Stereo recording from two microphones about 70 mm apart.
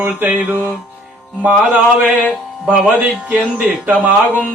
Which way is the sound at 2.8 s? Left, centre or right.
Right.